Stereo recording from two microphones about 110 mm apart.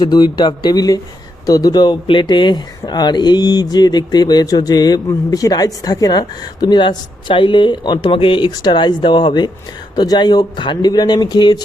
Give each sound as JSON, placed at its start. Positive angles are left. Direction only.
{"t": 0.0, "sound": "speech", "side_deg": 40}